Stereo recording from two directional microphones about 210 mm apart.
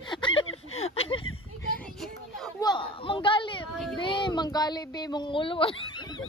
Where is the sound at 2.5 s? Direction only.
20° left (ahead or behind).